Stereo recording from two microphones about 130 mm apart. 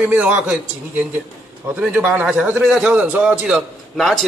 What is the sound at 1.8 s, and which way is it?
A man's voice, 10° right (ahead or behind).